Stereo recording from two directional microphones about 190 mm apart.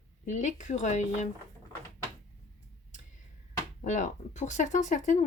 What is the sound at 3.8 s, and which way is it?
Speech, 40° left (ahead or behind).